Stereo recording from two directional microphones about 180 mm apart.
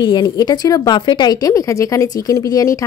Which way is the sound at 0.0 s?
25° left (ahead or behind).